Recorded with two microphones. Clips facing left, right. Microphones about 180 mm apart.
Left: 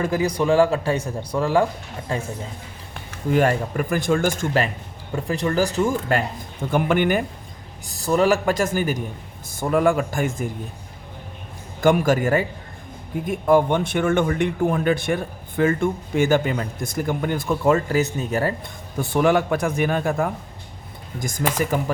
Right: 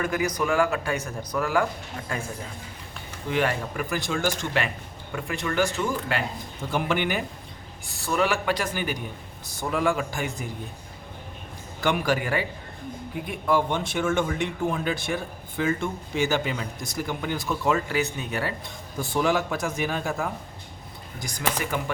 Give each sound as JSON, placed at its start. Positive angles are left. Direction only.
{"t": 0.0, "sound": "a man's voice", "side_deg": 30}
{"t": 3.2, "sound": "speech", "side_deg": 45}
{"t": 5.1, "sound": "speech", "side_deg": 35}
{"t": 7.9, "sound": "speech", "side_deg": 35}
{"t": 11.8, "sound": "speech", "side_deg": 45}
{"t": 18.9, "sound": "a man's voice", "side_deg": 60}